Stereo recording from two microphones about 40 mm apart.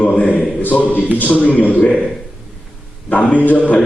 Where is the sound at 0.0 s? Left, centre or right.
Left.